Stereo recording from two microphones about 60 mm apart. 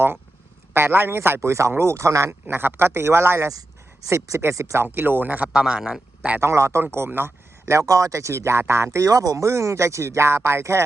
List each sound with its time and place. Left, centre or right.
0.7 s speech: right
2.5 s speech: right
5.5 s speech: centre
6.4 s speech: right
6.9 s speech: right
7.9 s speech: right